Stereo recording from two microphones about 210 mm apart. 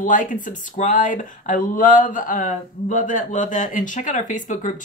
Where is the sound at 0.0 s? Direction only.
40° left (ahead or behind).